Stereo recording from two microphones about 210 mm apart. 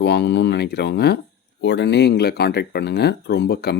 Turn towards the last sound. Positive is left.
turn(degrees=50)  # may be behind; listen again after turning